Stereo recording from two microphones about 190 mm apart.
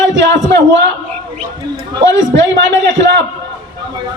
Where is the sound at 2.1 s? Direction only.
70° right (ahead or behind).